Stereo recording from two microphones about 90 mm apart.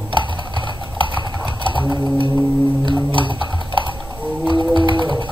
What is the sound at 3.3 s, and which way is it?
Typing, 65° right (ahead or behind).